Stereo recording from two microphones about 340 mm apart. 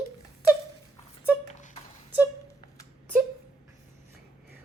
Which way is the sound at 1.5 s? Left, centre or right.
Left.